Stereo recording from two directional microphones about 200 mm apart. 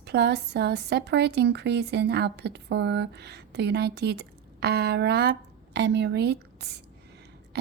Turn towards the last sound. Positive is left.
turn(degrees=-55)  # may be behind; listen again after turning